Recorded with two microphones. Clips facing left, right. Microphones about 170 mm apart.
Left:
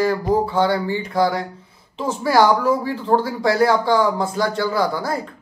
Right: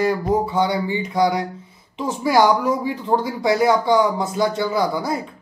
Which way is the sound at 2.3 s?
15° right (ahead or behind).